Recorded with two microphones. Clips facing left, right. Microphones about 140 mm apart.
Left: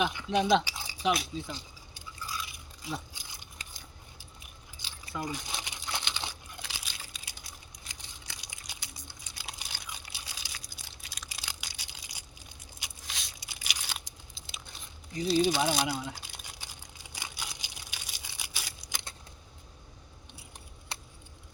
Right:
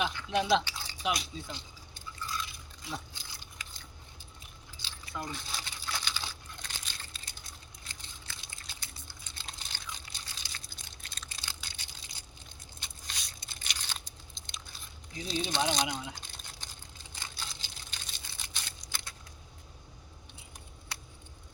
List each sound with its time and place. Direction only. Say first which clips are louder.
0.0 s drip: left 3 dB; 15° left (ahead or behind)
0.6 s rattle: left 1 dB; 10° left (ahead or behind)
1.0 s speech: left 4 dB; centre (ahead or behind)
2.2 s a sound: right 1 dB; 10° left (ahead or behind)
4.8 s keys jangling: even; 15° left (ahead or behind)
5.1 s crumpling: left 3 dB; 10° left (ahead or behind)
6.6 s a sound: left 3 dB; 5° left (ahead or behind)
11.9 s crushing: left 1 dB; 10° left (ahead or behind)
12.8 s biting: left 1 dB; centre (ahead or behind)
13.3 s tearing: left 2 dB; 10° left (ahead or behind)
15.1 s speech: left 8 dB; 5° left (ahead or behind)
16.2 s a sound: left 1 dB; 10° left (ahead or behind)